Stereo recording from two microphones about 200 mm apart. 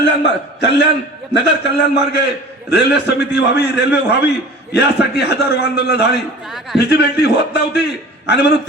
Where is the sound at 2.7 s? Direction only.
60° left (ahead or behind).